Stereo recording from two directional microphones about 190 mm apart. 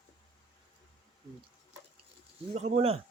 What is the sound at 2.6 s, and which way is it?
Speech, 35° right (ahead or behind).